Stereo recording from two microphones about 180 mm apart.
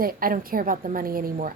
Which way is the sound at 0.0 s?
55° right (ahead or behind).